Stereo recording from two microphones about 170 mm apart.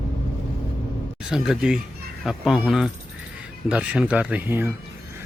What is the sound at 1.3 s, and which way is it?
Speech, 5° right (ahead or behind).